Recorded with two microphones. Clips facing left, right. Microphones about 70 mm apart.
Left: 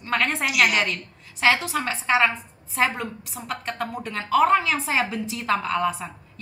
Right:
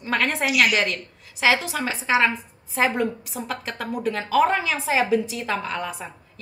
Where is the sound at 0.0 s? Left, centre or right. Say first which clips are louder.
Right 1 dB; centre.